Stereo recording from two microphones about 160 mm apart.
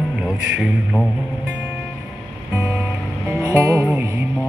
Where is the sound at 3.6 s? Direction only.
15° right (ahead or behind).